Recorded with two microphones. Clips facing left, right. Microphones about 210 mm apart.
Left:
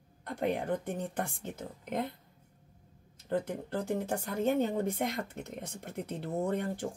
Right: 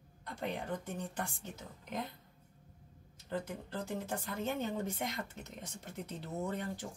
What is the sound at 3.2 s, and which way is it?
Speech, 55° left (ahead or behind).